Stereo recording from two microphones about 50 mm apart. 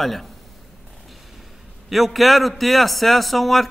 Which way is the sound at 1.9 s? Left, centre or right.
Centre.